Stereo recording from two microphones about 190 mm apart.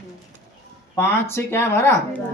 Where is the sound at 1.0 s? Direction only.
15° left (ahead or behind).